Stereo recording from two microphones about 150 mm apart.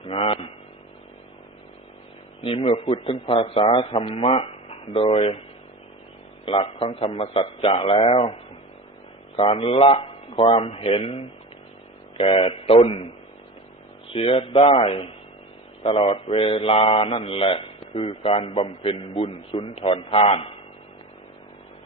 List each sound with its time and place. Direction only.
0.0 s a sound: 40° left (ahead or behind)
2.4 s mantra: 35° left (ahead or behind)
4.7 s speech: 40° left (ahead or behind)
6.4 s mantra: 35° left (ahead or behind)
14.1 s mantra: 40° left (ahead or behind)